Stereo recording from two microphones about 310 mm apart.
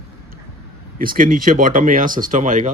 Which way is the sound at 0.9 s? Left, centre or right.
Right.